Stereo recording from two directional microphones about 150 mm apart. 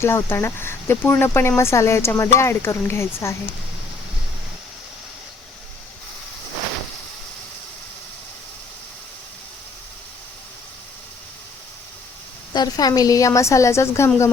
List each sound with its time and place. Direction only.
0.0 s speech: 15° left (ahead or behind)
12.5 s a woman's voice: 25° left (ahead or behind)